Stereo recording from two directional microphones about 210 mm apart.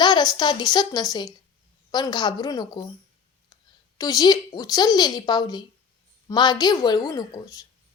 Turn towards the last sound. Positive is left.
turn(degrees=15)  # may be behind; listen again after turning